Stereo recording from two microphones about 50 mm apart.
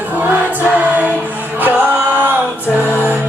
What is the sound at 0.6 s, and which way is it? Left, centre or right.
Choir, right.